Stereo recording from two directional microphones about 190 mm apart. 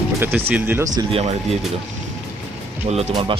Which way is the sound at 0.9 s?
30° right (ahead or behind).